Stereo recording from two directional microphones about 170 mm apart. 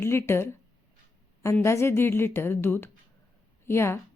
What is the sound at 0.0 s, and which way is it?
A woman's voice, 15° left (ahead or behind).